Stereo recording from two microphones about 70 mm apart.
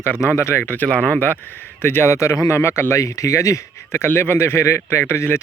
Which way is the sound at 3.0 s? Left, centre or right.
Left.